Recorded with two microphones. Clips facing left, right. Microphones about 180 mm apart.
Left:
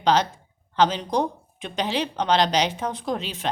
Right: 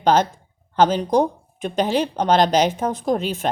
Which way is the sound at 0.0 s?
50° right (ahead or behind).